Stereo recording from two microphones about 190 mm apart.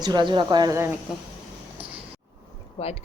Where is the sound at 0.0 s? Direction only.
25° right (ahead or behind).